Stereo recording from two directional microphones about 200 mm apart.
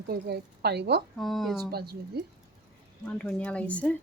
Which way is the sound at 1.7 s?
50° right (ahead or behind).